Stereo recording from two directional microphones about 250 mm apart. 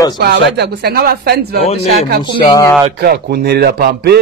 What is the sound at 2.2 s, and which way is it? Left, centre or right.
Speech, centre.